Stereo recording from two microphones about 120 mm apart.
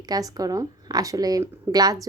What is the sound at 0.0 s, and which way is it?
A woman's voice, 30° right (ahead or behind).